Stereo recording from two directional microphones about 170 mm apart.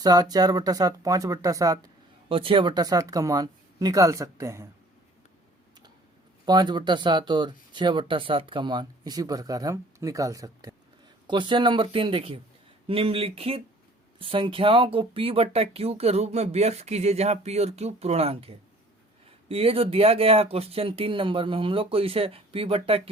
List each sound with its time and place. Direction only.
0.0 s speech: 20° right (ahead or behind)
2.3 s speech: 30° right (ahead or behind)
6.4 s speech: 25° right (ahead or behind)